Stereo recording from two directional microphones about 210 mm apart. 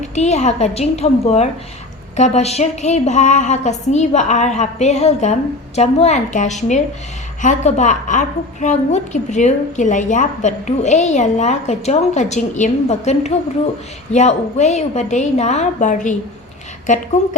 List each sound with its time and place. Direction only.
0.0 s a woman's voice: 35° left (ahead or behind)